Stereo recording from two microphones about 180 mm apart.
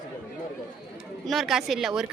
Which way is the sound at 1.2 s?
Centre (ahead or behind).